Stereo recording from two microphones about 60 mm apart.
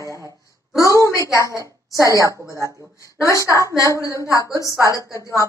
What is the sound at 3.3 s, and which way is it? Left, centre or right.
Speech, right.